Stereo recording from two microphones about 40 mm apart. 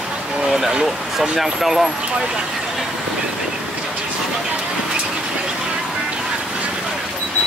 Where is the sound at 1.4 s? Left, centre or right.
Centre.